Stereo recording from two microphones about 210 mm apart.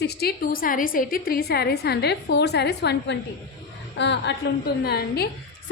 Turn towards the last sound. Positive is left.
turn(degrees=50)  # may be behind; listen again after turning